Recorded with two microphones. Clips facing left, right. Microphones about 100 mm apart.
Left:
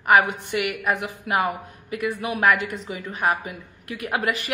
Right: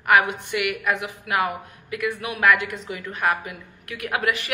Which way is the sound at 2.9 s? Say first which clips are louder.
Even; 20° left (ahead or behind).